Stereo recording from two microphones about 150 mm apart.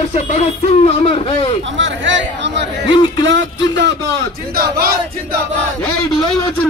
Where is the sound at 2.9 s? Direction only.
30° left (ahead or behind).